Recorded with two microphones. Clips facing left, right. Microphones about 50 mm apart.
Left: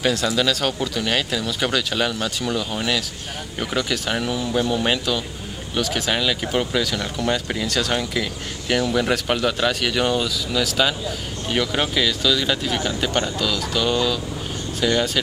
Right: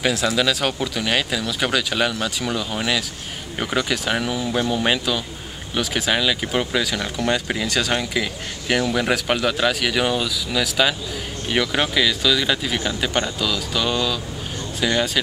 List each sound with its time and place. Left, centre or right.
0.0 s speech: centre
4.5 s speech: centre
4.7 s speech: centre
14.8 s speech: centre